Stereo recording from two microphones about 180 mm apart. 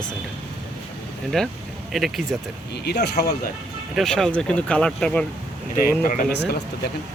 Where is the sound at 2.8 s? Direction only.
65° left (ahead or behind).